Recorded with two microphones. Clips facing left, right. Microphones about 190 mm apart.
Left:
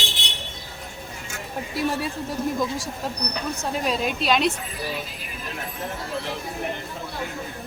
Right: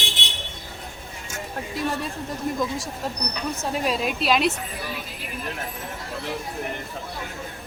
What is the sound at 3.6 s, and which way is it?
Speech, centre (ahead or behind).